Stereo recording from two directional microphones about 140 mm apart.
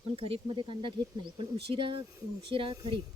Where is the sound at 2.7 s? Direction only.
25° right (ahead or behind).